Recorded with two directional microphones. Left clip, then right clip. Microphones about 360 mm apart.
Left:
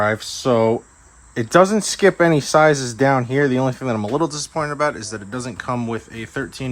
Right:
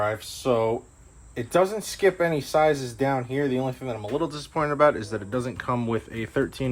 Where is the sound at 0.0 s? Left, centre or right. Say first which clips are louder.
Left 7 dB; left.